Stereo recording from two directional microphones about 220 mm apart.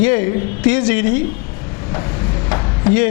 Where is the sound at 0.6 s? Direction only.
15° left (ahead or behind).